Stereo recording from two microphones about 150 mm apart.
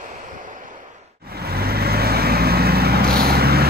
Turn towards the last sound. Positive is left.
turn(degrees=-90)